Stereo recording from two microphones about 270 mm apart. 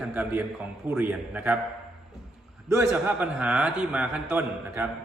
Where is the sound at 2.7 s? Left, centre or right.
Centre.